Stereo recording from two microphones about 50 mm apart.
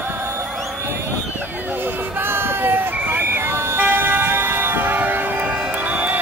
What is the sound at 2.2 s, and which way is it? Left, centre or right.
Vehicle, right.